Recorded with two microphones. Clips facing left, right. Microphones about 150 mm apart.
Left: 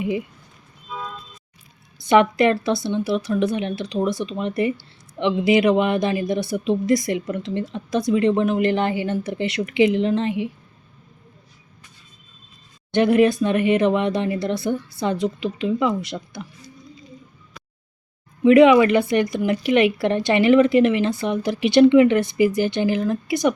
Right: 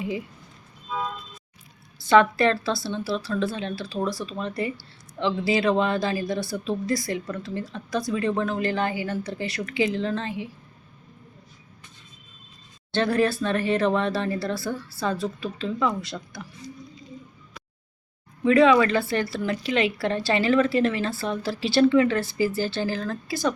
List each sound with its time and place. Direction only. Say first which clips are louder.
2.0 s a woman's voice: left 2 dB; 20° left (ahead or behind)
12.9 s a woman's voice: left 6 dB; 20° left (ahead or behind)
18.4 s a woman's voice: left 5 dB; 20° left (ahead or behind)